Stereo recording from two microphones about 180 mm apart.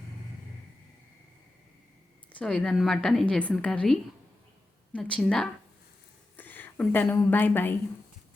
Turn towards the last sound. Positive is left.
turn(degrees=10)  # may be behind; listen again after turning